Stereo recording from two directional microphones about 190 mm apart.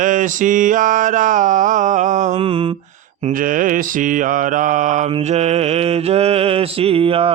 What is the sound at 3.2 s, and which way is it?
Mantra, 45° right (ahead or behind).